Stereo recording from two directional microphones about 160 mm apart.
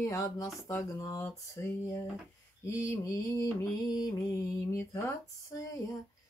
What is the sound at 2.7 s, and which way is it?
Speech, 20° left (ahead or behind).